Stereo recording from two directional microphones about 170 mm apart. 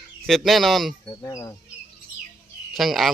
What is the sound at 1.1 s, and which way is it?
Speech, 20° left (ahead or behind).